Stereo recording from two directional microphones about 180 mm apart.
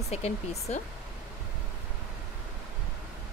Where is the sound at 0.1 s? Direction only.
35° left (ahead or behind).